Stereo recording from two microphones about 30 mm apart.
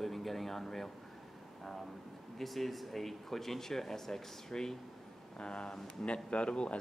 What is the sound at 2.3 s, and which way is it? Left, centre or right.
Speech, centre.